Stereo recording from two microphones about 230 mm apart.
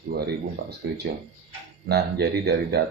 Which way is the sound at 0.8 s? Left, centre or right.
Right.